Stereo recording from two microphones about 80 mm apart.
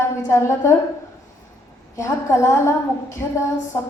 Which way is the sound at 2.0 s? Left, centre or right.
Left.